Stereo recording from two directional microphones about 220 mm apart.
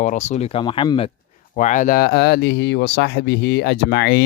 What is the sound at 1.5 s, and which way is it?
Speech, 35° left (ahead or behind).